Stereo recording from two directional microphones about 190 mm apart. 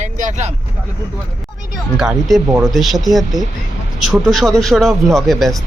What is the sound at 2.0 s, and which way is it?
Speech, centre (ahead or behind).